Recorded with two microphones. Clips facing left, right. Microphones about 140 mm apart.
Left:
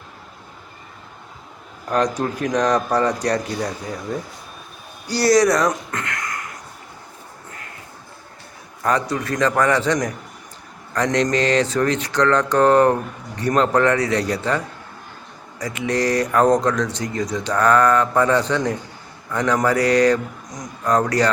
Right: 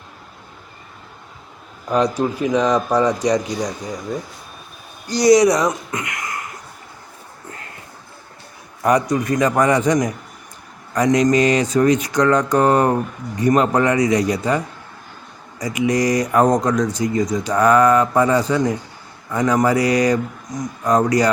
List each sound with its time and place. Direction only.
1.9 s speech: 10° right (ahead or behind)
5.2 s speech: 20° right (ahead or behind)
8.8 s speech: 15° right (ahead or behind)